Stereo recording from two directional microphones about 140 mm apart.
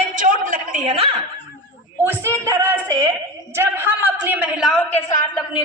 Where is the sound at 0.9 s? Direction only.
45° right (ahead or behind).